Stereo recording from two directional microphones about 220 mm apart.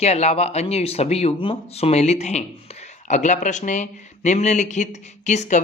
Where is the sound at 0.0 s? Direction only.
30° left (ahead or behind).